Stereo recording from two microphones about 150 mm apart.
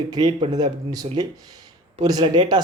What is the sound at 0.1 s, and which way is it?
Speech, 30° right (ahead or behind).